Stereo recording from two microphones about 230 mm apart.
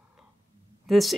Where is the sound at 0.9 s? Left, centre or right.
Centre.